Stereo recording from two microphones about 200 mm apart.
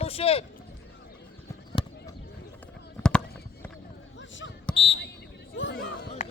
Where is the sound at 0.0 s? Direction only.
30° left (ahead or behind).